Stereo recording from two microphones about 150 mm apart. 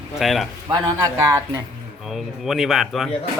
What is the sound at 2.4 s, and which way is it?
Speech, centre (ahead or behind).